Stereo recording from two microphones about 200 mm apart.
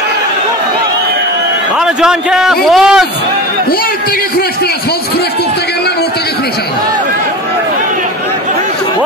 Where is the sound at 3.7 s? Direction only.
45° left (ahead or behind).